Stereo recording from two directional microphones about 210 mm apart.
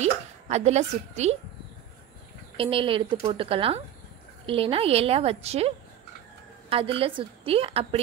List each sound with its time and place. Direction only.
0.0 s speech: 30° right (ahead or behind)
2.5 s speech: 25° right (ahead or behind)
6.7 s speech: 25° right (ahead or behind)